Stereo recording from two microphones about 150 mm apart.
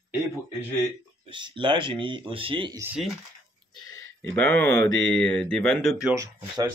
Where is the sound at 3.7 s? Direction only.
25° left (ahead or behind).